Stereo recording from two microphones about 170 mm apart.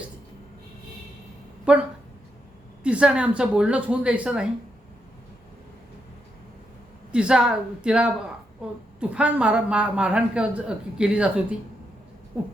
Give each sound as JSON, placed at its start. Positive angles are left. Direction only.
{"t": 1.7, "sound": "a man's voice", "side_deg": -5}
{"t": 2.8, "sound": "a man's voice", "side_deg": -5}
{"t": 7.1, "sound": "a man's voice", "side_deg": -5}